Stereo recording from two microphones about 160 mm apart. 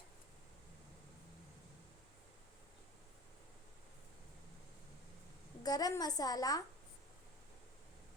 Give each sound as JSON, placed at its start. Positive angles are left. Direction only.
{"t": 5.6, "sound": "a woman's voice", "side_deg": 25}